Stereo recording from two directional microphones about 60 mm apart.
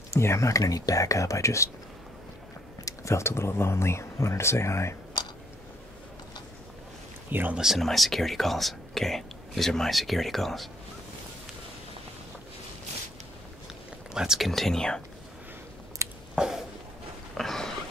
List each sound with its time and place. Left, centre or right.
0.1 s speech: left
2.8 s speech: left
7.2 s speech: right
7.5 s speech: centre
14.1 s speech: centre
14.5 s speech: centre
16.0 s a sound: right
16.3 s a sound: centre
17.4 s a sound: centre